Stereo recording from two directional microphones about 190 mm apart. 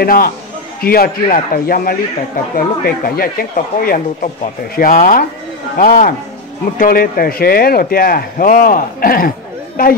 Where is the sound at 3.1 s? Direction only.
50° left (ahead or behind).